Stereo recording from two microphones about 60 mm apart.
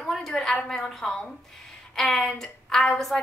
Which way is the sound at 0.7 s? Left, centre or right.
Centre.